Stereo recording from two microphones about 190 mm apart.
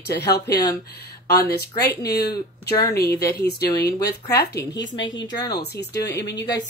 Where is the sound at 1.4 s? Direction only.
55° left (ahead or behind).